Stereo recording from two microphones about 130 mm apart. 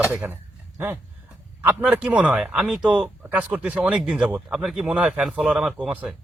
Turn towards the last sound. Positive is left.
turn(degrees=-10)  # may be behind; listen again after turning